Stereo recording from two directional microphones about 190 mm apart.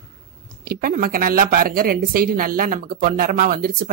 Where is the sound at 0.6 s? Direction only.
50° right (ahead or behind).